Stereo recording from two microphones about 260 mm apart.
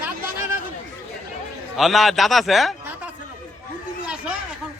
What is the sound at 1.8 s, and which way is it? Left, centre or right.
Speech, centre.